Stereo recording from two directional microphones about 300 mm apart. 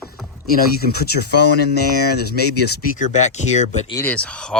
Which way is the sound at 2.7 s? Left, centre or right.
Left.